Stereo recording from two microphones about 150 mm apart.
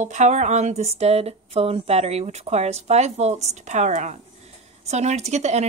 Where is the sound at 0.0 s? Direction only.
50° right (ahead or behind).